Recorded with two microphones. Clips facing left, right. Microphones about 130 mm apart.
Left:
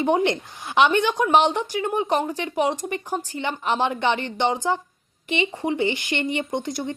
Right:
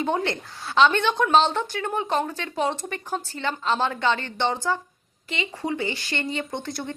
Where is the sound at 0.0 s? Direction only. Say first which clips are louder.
Left 5 dB; 15° left (ahead or behind).